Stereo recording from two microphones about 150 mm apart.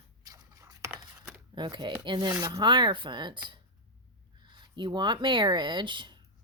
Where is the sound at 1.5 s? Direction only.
30° right (ahead or behind).